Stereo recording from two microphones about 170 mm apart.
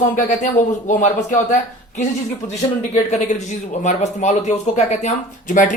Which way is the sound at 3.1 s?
40° left (ahead or behind).